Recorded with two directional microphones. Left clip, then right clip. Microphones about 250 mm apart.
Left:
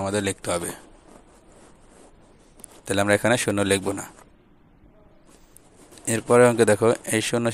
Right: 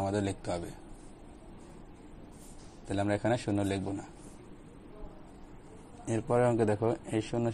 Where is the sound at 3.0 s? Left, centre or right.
Left.